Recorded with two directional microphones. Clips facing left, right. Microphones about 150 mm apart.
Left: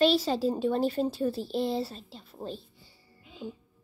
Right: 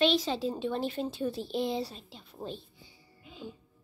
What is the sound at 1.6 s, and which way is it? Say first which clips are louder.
Speech: left 2 dB; centre (ahead or behind).